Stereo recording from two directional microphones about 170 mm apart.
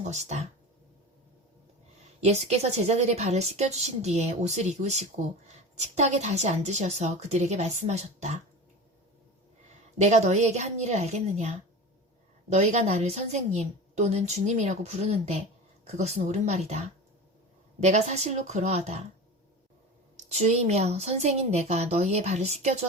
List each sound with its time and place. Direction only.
0.0 s speech: 40° right (ahead or behind)
2.2 s a woman's voice: 40° right (ahead or behind)
10.0 s a woman's voice: 45° right (ahead or behind)
20.3 s a woman's voice: 40° right (ahead or behind)